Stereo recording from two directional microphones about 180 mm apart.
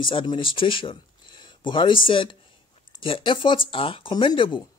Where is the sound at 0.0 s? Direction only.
25° left (ahead or behind).